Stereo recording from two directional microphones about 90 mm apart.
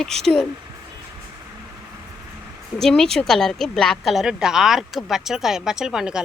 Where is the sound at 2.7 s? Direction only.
5° left (ahead or behind).